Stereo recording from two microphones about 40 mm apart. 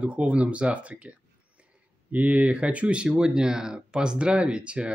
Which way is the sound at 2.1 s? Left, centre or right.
Right.